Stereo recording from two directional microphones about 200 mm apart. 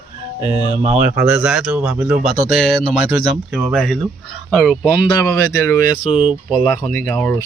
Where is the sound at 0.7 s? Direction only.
35° right (ahead or behind).